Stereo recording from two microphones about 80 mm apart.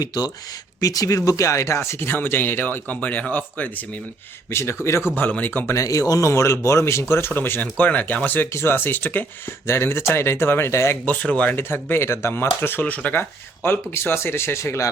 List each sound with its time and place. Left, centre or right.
0.0 s speech: left
0.8 s speech: left
4.5 s speech: left
5.1 s speech: left
5.7 s speech: left
11.0 s speech: centre
11.5 s speech: left